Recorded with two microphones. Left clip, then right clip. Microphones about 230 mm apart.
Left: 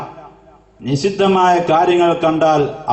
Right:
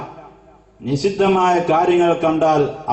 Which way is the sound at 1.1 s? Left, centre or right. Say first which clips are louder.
Left 3 dB; centre.